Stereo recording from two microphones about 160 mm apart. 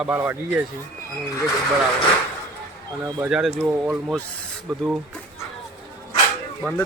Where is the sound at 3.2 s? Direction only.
5° right (ahead or behind).